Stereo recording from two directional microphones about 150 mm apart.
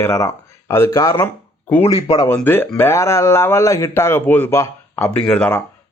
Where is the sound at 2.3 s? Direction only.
15° left (ahead or behind).